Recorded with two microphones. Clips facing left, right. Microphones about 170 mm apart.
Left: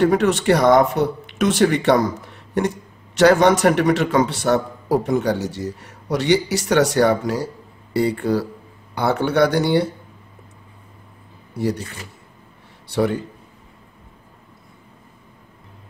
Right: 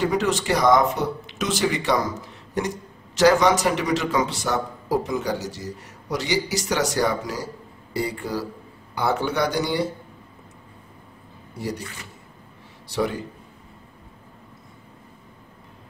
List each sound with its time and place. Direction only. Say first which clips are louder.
0.0 s a man's voice: left 6 dB; 60° left (ahead or behind)
11.5 s speech: left 7 dB; 65° left (ahead or behind)
12.8 s a man's voice: left 5 dB; 60° left (ahead or behind)